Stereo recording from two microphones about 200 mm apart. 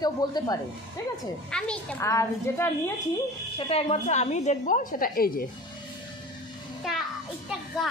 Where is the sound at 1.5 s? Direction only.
5° left (ahead or behind).